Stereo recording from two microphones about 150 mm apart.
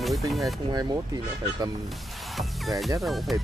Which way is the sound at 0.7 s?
25° right (ahead or behind).